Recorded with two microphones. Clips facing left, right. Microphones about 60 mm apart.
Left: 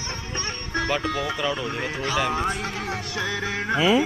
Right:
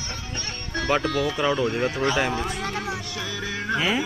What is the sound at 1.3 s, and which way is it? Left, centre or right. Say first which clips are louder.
Speech: right 3 dB; right.